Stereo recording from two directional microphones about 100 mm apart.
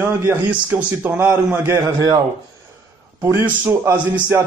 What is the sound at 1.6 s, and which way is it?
Speech, 30° right (ahead or behind).